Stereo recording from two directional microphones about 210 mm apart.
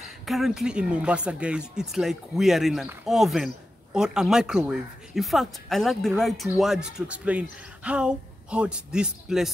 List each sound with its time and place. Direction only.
0.0 s speech: centre (ahead or behind)